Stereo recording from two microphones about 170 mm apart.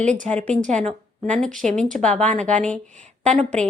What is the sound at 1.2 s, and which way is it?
A woman's voice, 5° left (ahead or behind).